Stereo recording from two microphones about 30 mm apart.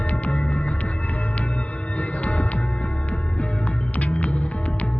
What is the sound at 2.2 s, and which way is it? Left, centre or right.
Music, left.